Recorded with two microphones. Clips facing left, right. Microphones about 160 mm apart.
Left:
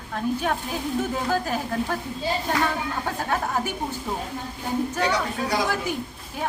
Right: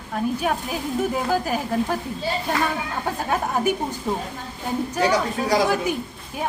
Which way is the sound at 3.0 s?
15° right (ahead or behind).